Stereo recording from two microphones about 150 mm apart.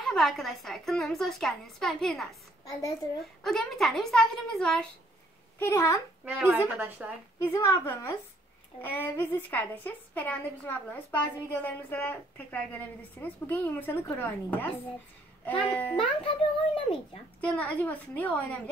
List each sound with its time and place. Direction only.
0.0 s a woman's voice: centre (ahead or behind)
5.6 s a child's voice: 20° left (ahead or behind)
6.2 s a woman's voice: 10° right (ahead or behind)
7.4 s a woman's voice: 20° left (ahead or behind)
16.3 s a child's voice: 35° left (ahead or behind)
17.4 s a woman's voice: 10° left (ahead or behind)